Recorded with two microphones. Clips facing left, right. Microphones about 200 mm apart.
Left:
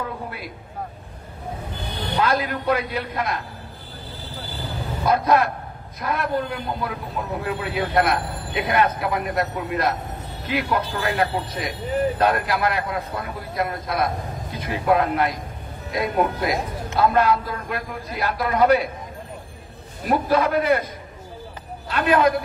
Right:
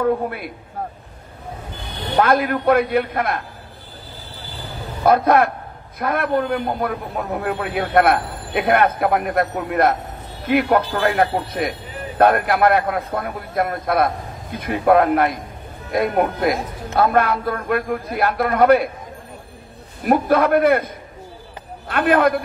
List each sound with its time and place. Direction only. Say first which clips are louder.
0.0 s a man's voice: right 11 dB; 55° right (ahead or behind)
2.1 s a man's voice: right 6 dB; 55° right (ahead or behind)
5.0 s a man's voice: right 4 dB; 55° right (ahead or behind)
20.1 s a man's voice: right 4 dB; 55° right (ahead or behind)